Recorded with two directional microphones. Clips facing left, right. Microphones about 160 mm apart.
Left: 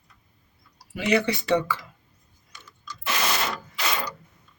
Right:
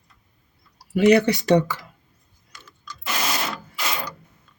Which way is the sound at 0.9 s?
40° right (ahead or behind).